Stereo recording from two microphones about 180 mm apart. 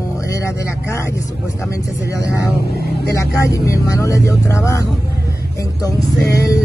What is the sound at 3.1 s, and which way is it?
Speech, 20° left (ahead or behind).